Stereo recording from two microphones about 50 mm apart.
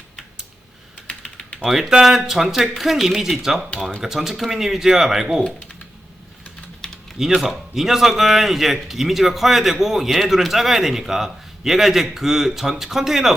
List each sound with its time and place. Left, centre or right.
1.0 s typing: left
1.5 s speech: centre
6.8 s typing: centre
7.2 s speech: centre